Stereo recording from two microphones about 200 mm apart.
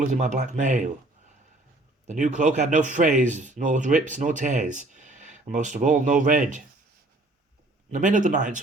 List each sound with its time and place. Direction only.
0.0 s a man's voice: 40° right (ahead or behind)
2.0 s a man's voice: 40° right (ahead or behind)
7.9 s a man's voice: 40° right (ahead or behind)